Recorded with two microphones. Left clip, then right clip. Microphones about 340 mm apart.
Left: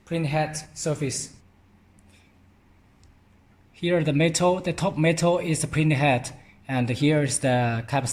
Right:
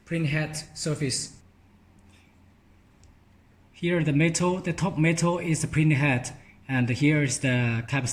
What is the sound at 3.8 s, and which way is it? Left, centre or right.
Speech, centre.